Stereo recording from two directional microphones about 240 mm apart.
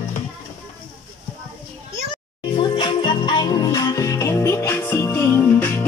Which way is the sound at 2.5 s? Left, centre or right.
Left.